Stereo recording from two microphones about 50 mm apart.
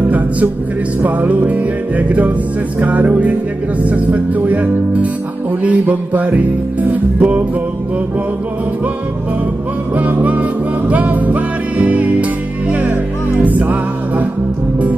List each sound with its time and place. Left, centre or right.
1.0 s music: right
9.9 s music: right
13.4 s music: right